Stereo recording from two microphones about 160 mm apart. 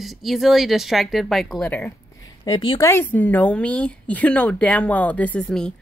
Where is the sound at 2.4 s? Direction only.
25° left (ahead or behind).